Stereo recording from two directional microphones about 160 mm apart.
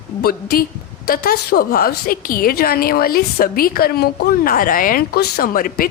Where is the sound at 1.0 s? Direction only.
70° left (ahead or behind).